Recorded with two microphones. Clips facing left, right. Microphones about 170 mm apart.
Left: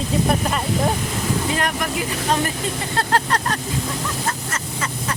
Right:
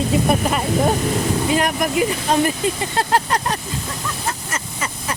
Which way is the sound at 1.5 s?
15° right (ahead or behind).